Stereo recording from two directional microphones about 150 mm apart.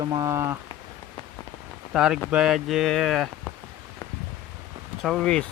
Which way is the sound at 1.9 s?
5° right (ahead or behind).